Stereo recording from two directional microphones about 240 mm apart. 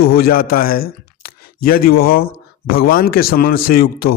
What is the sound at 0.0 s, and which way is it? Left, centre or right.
A man's voice, left.